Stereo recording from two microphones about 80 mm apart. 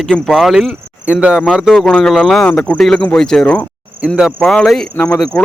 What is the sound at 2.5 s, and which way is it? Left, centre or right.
Cricket, centre.